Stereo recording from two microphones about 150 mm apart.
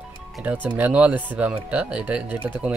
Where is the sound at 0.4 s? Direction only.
10° right (ahead or behind).